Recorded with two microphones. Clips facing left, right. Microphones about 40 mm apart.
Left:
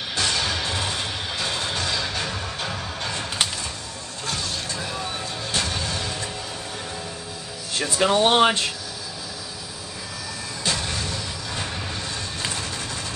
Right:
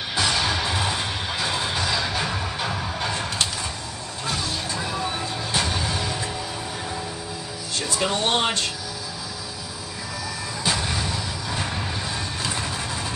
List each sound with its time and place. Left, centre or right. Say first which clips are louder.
0.1 s music: right 2 dB; centre
4.3 s vehicle: right 1 dB; centre
7.8 s speech: left 5 dB; left
10.6 s vehicle: right 2 dB; centre